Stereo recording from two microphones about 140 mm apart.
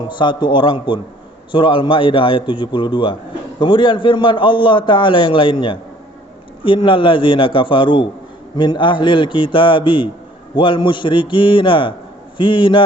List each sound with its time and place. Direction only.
0.1 s a man's voice: 35° left (ahead or behind)